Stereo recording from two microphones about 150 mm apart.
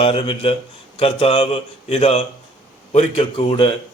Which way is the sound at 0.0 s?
40° left (ahead or behind).